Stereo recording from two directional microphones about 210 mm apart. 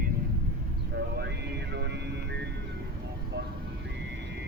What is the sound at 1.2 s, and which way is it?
Music, 55° right (ahead or behind).